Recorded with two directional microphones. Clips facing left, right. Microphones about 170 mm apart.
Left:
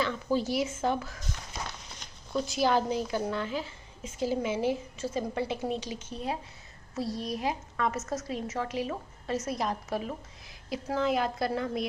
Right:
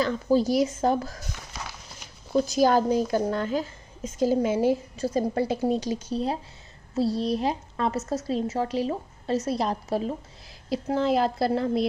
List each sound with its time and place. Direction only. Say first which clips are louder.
0.0 s a woman's voice: right 6 dB; 40° right (ahead or behind)
2.3 s a woman's voice: right 6 dB; 40° right (ahead or behind)